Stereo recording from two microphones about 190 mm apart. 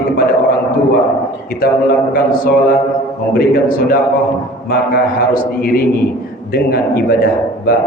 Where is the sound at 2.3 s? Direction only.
50° left (ahead or behind).